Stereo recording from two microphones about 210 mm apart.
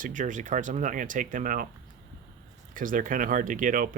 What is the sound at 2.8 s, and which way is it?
Speech, 40° right (ahead or behind).